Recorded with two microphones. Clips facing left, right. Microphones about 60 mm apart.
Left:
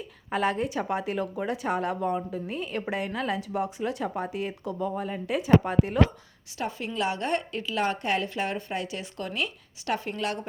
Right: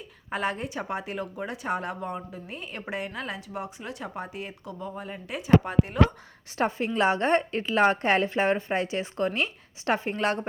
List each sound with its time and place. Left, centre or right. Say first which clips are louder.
0.3 s speech: left 3 dB; centre
6.6 s a woman's voice: right 5 dB; right